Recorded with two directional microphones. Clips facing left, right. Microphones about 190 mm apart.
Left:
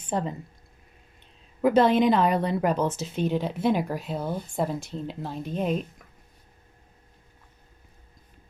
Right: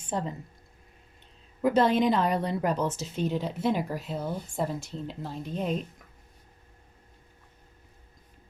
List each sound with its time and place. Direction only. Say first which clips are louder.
1.6 s a woman's voice: left 3 dB; 65° left (ahead or behind)